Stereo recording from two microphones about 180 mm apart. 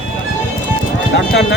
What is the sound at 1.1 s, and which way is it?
Speech, 75° left (ahead or behind).